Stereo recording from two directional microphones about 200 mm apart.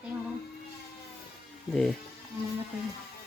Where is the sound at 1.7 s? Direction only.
5° left (ahead or behind).